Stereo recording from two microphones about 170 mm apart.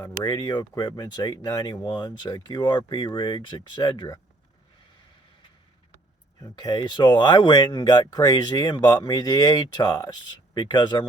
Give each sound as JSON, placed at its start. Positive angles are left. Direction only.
{"t": 0.0, "sound": "speech", "side_deg": 25}
{"t": 6.4, "sound": "speech", "side_deg": 25}